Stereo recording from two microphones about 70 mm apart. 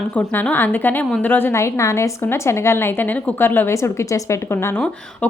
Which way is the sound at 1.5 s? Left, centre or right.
Left.